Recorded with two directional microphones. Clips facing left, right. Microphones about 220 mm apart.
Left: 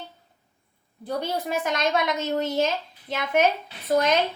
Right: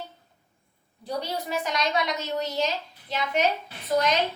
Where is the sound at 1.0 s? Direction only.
50° left (ahead or behind).